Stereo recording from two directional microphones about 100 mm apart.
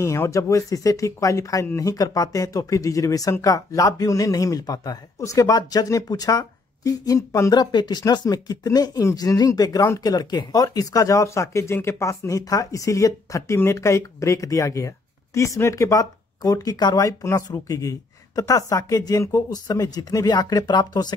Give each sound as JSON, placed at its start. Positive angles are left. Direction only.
{"t": 0.0, "sound": "speech", "side_deg": 30}
{"t": 7.6, "sound": "speech", "side_deg": 45}